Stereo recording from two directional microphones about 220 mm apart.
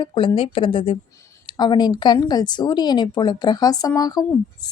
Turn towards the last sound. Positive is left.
turn(degrees=20)  # may be behind; listen again after turning